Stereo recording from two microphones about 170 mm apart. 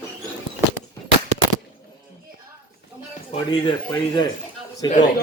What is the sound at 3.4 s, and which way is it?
Speech, 25° left (ahead or behind).